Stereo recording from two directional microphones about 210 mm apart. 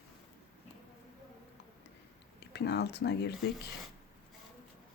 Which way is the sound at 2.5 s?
50° left (ahead or behind).